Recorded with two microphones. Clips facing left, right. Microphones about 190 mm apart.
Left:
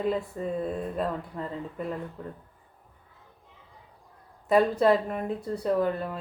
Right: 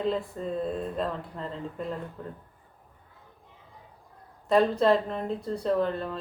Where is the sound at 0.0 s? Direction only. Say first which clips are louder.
Left 1 dB; 10° left (ahead or behind).